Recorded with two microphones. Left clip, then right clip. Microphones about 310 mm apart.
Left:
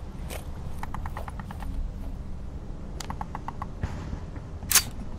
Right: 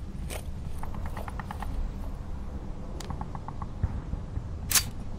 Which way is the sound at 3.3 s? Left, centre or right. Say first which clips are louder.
Left 4 dB; left.